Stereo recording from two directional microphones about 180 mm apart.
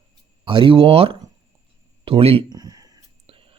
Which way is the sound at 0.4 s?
30° right (ahead or behind).